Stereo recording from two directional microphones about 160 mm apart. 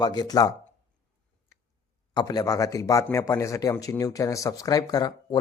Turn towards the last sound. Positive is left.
turn(degrees=25)  # may be behind; listen again after turning